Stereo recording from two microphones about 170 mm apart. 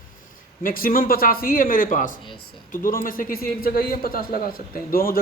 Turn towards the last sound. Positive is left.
turn(degrees=60)  # may be behind; listen again after turning